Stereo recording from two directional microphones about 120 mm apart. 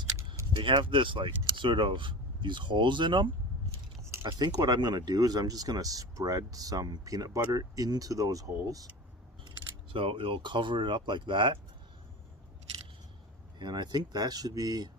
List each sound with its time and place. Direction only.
0.5 s speech: 40° right (ahead or behind)
9.9 s speech: 50° right (ahead or behind)
13.6 s speech: 35° right (ahead or behind)